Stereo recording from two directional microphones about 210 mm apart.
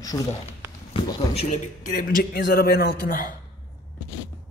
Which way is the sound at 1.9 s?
40° left (ahead or behind).